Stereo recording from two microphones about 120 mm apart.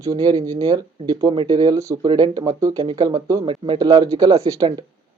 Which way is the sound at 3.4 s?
45° right (ahead or behind).